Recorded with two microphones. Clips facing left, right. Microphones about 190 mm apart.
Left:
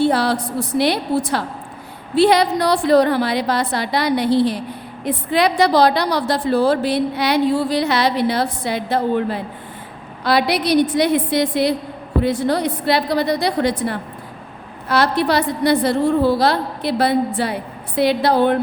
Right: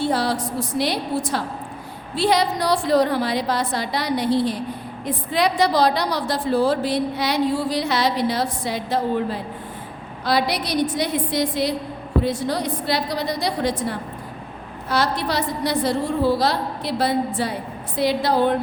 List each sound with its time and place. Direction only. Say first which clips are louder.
0.0 s a woman's voice: left 4 dB; 65° left (ahead or behind)